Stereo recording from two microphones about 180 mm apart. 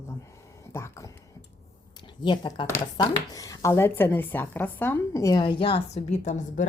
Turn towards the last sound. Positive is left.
turn(degrees=40)  # may be behind; listen again after turning